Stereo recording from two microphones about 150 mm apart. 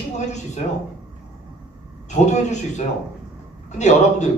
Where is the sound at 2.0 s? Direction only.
50° left (ahead or behind).